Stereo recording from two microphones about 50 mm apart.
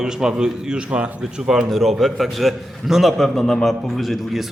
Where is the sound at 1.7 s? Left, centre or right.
Centre.